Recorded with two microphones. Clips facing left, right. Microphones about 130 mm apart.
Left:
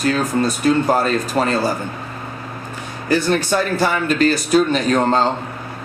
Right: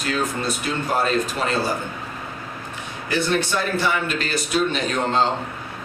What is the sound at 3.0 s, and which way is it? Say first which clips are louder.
Speech: left 5 dB; 40° left (ahead or behind).